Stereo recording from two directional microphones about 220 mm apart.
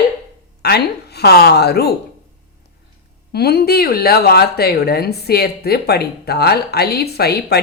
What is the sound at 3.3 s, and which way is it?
Speech, 45° left (ahead or behind).